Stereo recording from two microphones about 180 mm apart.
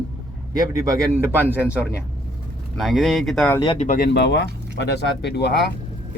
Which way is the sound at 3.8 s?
55° left (ahead or behind).